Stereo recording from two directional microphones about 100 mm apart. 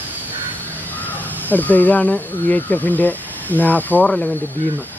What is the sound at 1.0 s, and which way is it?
Speech, 15° left (ahead or behind).